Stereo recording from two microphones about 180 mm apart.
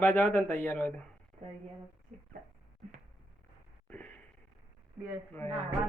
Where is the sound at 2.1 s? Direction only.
45° right (ahead or behind).